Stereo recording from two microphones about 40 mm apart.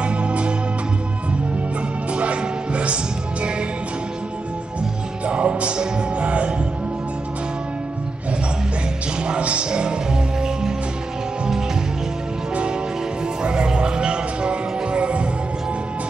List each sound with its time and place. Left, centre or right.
0.0 s music: right
2.1 s music: right
5.2 s music: right
9.2 s music: right
13.4 s music: right